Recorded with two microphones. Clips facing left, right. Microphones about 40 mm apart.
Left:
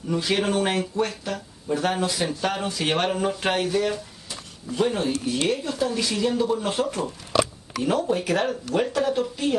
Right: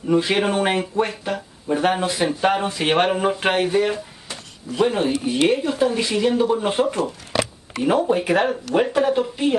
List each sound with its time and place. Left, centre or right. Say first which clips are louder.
0.1 s speech: right 5 dB; right